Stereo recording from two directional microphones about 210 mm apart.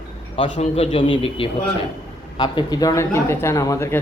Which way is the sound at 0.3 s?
25° left (ahead or behind).